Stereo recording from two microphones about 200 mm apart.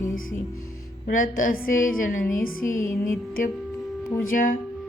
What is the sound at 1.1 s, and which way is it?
A woman's voice, 40° left (ahead or behind).